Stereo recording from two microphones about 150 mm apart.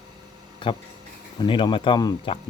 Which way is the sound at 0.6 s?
35° left (ahead or behind).